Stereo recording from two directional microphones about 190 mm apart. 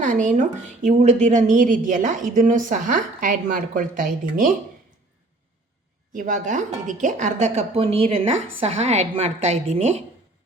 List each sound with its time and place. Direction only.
0.0 s a woman's voice: 40° right (ahead or behind)
6.1 s speech: 40° right (ahead or behind)